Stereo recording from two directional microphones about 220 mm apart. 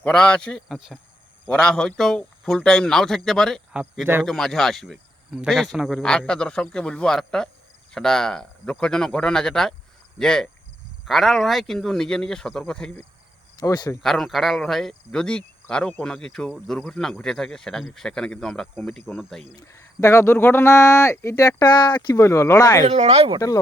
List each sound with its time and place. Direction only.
0.0 s speech: 5° left (ahead or behind)
13.6 s speech: 15° left (ahead or behind)
14.0 s speech: centre (ahead or behind)
19.5 s speech: 15° left (ahead or behind)
22.9 s speech: 30° right (ahead or behind)